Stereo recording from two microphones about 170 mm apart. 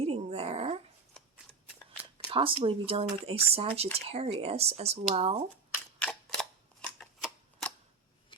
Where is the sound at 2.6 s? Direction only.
35° right (ahead or behind).